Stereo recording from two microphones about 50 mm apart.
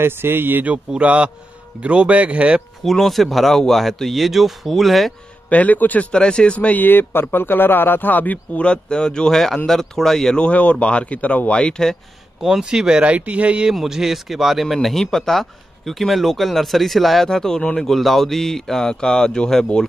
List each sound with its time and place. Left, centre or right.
0.0 s speech: right
0.7 s speech: right
2.8 s speech: centre
5.5 s a man's voice: left
6.1 s speech: centre
6.8 s speech: left
8.6 s speech: centre
10.3 s speech: left
12.4 s speech: centre; by 13.7 s right
13.7 s speech: centre